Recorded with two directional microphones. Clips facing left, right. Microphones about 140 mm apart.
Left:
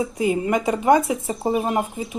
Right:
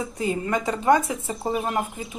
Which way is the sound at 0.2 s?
15° left (ahead or behind).